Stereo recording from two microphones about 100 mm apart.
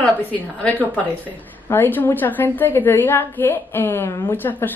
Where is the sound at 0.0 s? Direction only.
15° left (ahead or behind).